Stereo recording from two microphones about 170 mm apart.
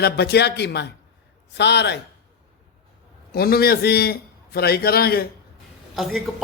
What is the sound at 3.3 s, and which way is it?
Speech, 65° left (ahead or behind).